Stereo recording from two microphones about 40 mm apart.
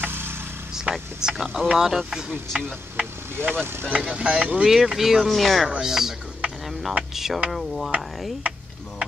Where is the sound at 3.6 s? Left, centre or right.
Right.